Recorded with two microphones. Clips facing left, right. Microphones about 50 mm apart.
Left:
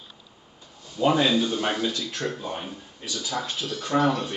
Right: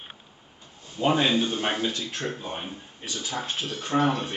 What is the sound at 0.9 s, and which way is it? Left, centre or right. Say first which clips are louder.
Speech: left 2 dB; right.